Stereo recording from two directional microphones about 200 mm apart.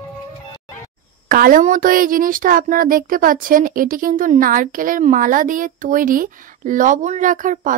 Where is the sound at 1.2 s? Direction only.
45° right (ahead or behind).